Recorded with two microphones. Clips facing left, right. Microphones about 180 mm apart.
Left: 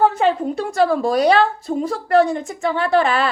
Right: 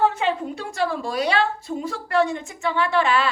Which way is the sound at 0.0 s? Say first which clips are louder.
Left 5 dB; 40° left (ahead or behind).